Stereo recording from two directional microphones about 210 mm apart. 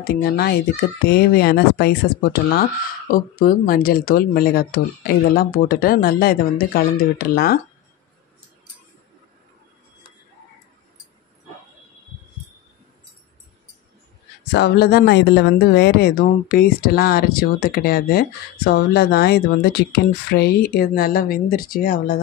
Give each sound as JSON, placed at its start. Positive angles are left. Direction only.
{"t": 0.0, "sound": "speech", "side_deg": 45}
{"t": 3.1, "sound": "speech", "side_deg": 40}
{"t": 14.4, "sound": "speech", "side_deg": 55}